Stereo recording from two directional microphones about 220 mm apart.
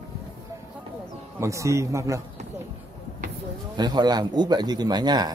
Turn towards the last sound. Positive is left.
turn(degrees=-20)  # may be behind; listen again after turning